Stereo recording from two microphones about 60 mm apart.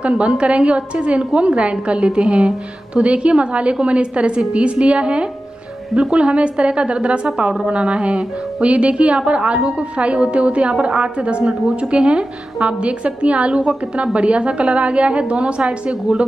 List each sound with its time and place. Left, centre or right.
0.0 s speech: centre